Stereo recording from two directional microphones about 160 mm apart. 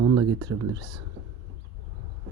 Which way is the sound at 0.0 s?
25° right (ahead or behind).